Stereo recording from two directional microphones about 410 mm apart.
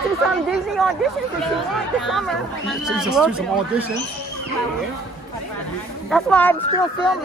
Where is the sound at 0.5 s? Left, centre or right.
Centre.